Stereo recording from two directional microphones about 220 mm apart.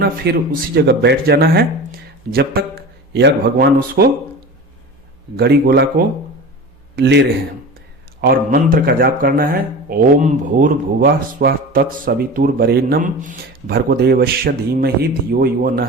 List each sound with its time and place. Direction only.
0.0 s speech: 45° right (ahead or behind)
5.4 s speech: 50° right (ahead or behind)
6.9 s speech: 50° right (ahead or behind)